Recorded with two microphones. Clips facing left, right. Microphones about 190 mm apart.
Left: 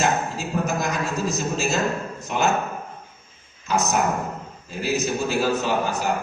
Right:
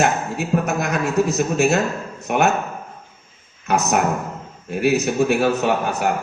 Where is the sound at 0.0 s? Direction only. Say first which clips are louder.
Right 3 dB; 65° right (ahead or behind).